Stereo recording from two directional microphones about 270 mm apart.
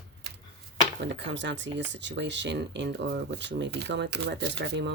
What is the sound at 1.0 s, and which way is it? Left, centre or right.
Speech, right.